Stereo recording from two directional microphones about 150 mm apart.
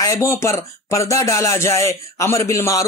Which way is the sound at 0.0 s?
20° left (ahead or behind).